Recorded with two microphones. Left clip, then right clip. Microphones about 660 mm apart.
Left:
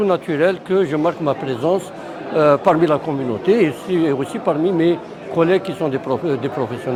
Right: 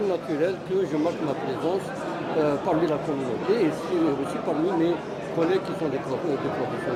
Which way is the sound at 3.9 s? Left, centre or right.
Left.